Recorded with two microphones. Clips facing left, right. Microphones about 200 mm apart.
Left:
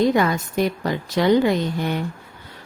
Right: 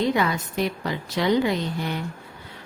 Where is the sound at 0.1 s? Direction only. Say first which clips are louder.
Left 4 dB; 45° left (ahead or behind).